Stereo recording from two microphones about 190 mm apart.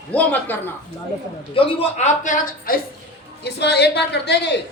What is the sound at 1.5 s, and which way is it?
A man's voice, 30° left (ahead or behind).